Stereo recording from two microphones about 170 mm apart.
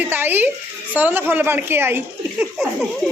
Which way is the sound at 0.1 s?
10° right (ahead or behind).